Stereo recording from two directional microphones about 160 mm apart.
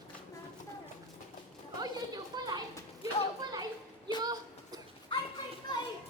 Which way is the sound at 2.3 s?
25° right (ahead or behind).